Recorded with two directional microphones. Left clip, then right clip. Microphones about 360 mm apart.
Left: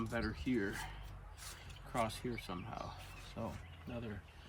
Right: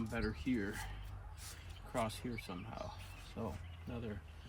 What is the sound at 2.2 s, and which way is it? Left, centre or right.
Speech, centre.